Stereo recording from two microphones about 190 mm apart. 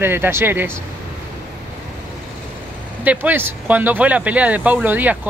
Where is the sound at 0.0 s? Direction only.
10° right (ahead or behind).